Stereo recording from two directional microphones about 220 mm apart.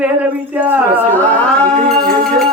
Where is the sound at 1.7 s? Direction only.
40° right (ahead or behind).